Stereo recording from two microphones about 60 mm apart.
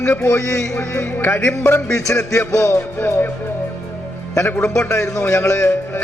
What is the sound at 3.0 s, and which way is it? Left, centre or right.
Speech, left.